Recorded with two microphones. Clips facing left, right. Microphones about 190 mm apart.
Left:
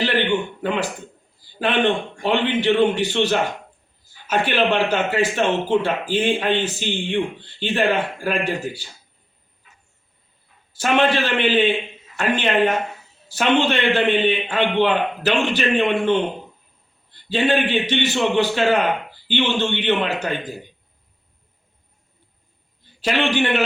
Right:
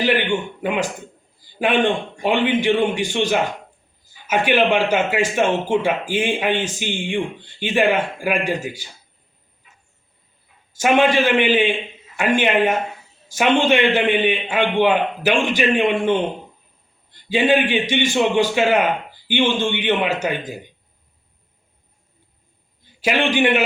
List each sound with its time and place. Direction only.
0.0 s a man's voice: 10° right (ahead or behind)
10.8 s speech: 10° right (ahead or behind)
22.8 s a man's voice: 10° right (ahead or behind)